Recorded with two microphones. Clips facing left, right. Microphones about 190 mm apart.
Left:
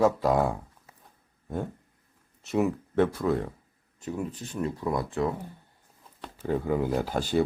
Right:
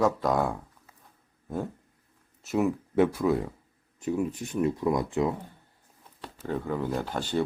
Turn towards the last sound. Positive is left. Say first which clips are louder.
# left 3 dB
turn(degrees=10)  # may be behind; listen again after turning